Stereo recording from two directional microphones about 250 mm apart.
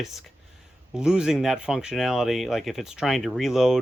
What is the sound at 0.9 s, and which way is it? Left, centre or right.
Speech, centre.